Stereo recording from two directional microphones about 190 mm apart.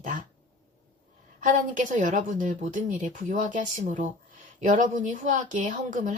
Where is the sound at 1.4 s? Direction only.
40° right (ahead or behind).